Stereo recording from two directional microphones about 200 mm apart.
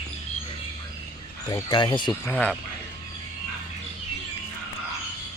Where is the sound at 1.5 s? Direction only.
20° left (ahead or behind).